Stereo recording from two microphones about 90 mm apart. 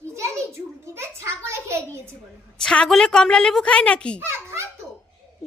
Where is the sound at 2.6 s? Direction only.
10° left (ahead or behind).